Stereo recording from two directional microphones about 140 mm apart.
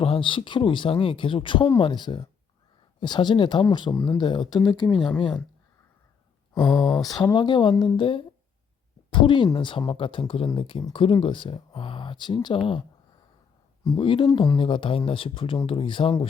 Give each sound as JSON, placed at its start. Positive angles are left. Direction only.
{"t": 0.0, "sound": "speech", "side_deg": 40}
{"t": 6.5, "sound": "a sound", "side_deg": 35}
{"t": 7.2, "sound": "speech", "side_deg": 30}
{"t": 13.9, "sound": "speech", "side_deg": 35}